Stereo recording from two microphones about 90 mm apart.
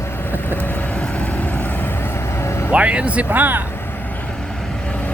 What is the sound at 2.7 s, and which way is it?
Speech, 15° right (ahead or behind).